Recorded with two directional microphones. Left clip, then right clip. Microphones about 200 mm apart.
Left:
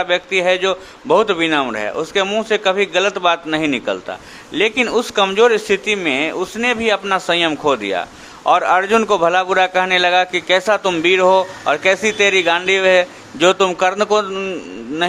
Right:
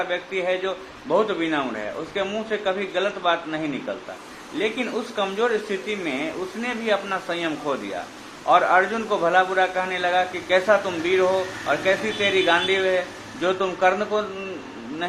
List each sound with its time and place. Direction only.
0.0 s a man's voice: 50° left (ahead or behind)